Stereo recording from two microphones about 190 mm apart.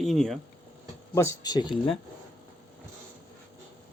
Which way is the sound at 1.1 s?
15° left (ahead or behind).